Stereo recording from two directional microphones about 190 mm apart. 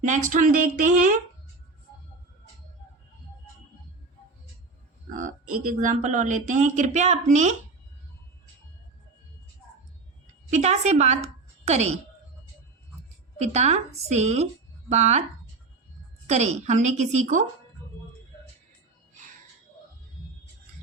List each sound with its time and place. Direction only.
0.0 s speech: 40° right (ahead or behind)
5.1 s speech: 45° right (ahead or behind)
10.5 s a woman's voice: 35° right (ahead or behind)
13.4 s speech: 35° right (ahead or behind)
16.2 s speech: 35° right (ahead or behind)